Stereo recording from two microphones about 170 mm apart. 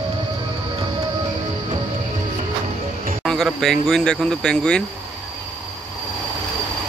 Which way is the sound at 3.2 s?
Centre (ahead or behind).